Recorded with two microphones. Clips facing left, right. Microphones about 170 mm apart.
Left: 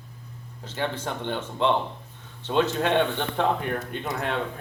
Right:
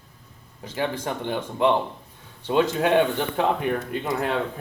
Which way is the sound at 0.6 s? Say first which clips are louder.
Right 3 dB; 10° right (ahead or behind).